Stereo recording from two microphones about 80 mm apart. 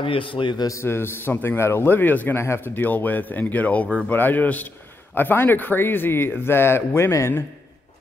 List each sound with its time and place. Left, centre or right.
0.0 s a man's voice: left
0.7 s speech: left
2.4 s speech: left
2.7 s speech: left